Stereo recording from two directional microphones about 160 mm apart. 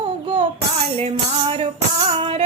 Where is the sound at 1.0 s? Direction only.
40° right (ahead or behind).